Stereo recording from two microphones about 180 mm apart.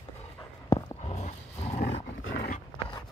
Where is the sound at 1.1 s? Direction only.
35° left (ahead or behind).